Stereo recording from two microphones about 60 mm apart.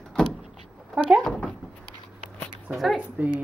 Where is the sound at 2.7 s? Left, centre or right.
Right.